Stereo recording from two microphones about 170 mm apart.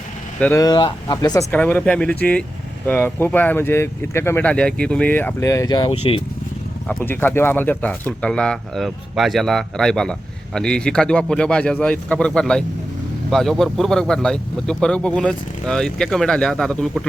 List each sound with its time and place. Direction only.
0.3 s speech: 10° left (ahead or behind)
0.6 s speech: 25° left (ahead or behind)
1.5 s speech: 10° left (ahead or behind); by 6.2 s 30° left (ahead or behind)
6.8 s speech: 10° left (ahead or behind)